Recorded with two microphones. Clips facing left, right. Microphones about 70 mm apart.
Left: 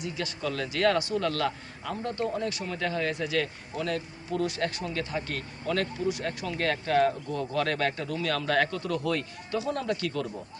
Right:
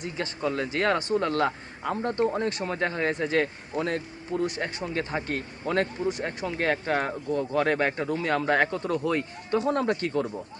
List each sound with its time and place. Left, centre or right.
0.0 s speech: right
4.4 s speech: right
9.6 s speech: right